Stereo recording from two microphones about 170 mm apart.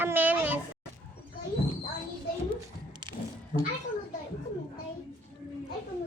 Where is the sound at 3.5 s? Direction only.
45° left (ahead or behind).